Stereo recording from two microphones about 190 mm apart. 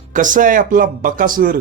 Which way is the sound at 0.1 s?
45° right (ahead or behind).